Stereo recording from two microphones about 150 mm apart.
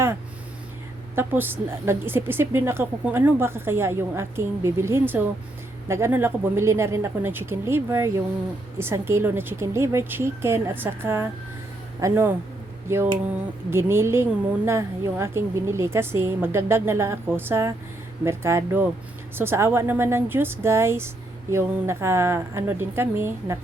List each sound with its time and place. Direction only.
1.1 s a woman's voice: 15° right (ahead or behind)